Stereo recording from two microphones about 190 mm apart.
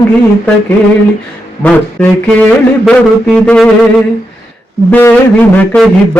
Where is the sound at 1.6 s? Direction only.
5° left (ahead or behind).